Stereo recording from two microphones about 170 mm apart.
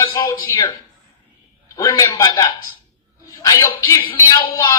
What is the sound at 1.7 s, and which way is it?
A man's voice, 20° left (ahead or behind).